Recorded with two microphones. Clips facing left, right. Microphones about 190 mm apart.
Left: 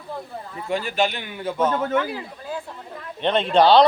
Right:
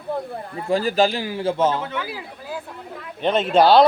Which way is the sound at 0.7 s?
35° right (ahead or behind).